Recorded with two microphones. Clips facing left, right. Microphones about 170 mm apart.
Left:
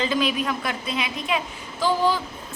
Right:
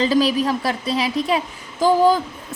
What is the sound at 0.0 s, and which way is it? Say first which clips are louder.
A woman's voice: right 6 dB; 35° right (ahead or behind).